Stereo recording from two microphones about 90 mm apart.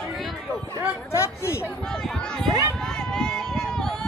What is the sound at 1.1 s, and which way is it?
Chatter, 30° left (ahead or behind).